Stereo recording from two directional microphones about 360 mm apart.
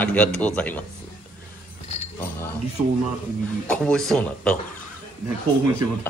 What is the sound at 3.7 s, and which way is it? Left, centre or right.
Speech, centre.